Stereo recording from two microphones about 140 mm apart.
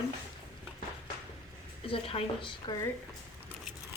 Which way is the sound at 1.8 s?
40° left (ahead or behind).